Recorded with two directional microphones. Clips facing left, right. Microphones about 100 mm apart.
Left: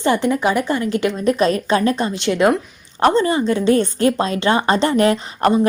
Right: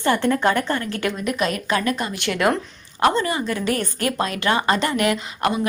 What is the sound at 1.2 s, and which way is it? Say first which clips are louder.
A woman's voice: left 7 dB; 35° left (ahead or behind).